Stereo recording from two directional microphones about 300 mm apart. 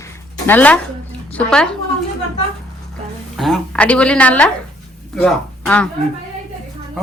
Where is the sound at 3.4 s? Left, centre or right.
Centre.